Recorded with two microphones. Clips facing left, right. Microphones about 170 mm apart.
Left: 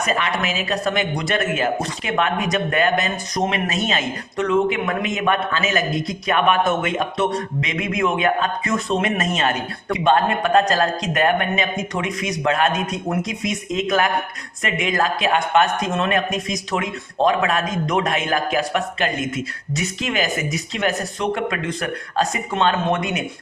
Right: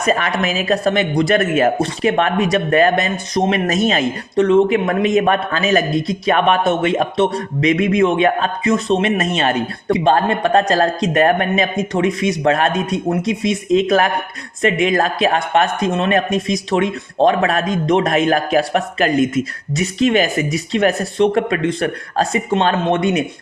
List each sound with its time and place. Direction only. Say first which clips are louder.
0.0 s speech: right 5 dB; 35° right (ahead or behind)